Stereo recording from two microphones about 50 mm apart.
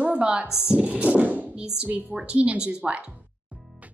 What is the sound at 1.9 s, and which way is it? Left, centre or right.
Speech, right.